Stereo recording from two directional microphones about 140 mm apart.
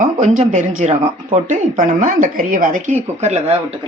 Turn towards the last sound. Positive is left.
turn(degrees=-50)  # may be behind; listen again after turning